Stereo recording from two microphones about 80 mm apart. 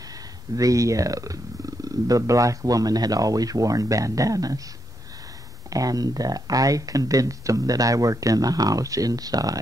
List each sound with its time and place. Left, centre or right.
0.6 s speech: right
5.7 s speech: right